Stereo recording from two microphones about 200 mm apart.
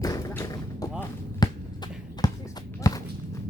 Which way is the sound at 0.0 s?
15° left (ahead or behind).